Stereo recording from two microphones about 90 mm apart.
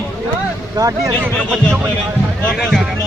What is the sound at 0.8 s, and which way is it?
Speech, 40° right (ahead or behind).